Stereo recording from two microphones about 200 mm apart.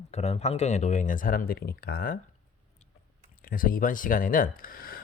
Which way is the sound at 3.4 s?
45° left (ahead or behind).